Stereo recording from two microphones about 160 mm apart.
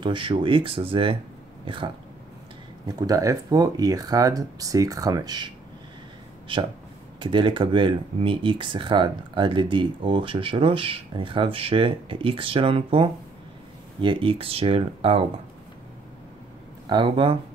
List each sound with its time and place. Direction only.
0.0 s speech: 30° right (ahead or behind)
3.0 s speech: 20° right (ahead or behind)
6.5 s speech: 30° right (ahead or behind)
16.9 s speech: 30° right (ahead or behind)